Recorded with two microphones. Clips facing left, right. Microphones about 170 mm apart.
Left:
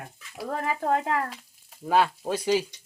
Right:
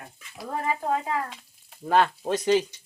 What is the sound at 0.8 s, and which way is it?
Speech, 60° left (ahead or behind).